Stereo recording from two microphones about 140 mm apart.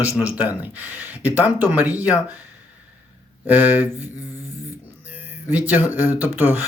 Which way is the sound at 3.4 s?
10° right (ahead or behind).